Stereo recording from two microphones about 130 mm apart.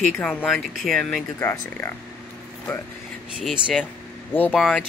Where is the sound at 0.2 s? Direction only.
5° left (ahead or behind).